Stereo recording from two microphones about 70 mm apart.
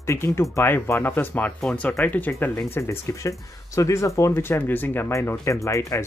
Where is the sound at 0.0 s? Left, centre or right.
Left.